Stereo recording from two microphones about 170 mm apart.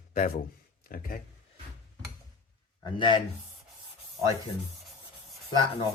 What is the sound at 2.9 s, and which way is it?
Speech, 30° left (ahead or behind).